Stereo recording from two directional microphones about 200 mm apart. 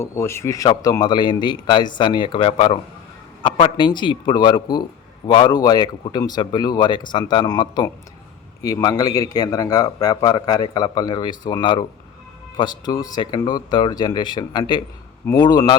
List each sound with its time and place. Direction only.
0.0 s a man's voice: 15° left (ahead or behind)